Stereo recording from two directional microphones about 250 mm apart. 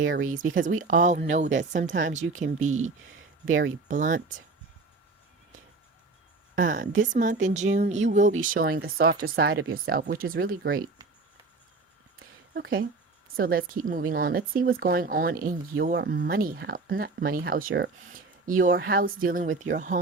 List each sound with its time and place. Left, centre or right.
0.2 s speech: right
3.4 s speech: right
3.8 s speech: right
6.6 s speech: right
12.5 s speech: right